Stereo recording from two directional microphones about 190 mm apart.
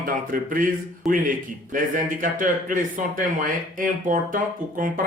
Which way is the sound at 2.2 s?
45° right (ahead or behind).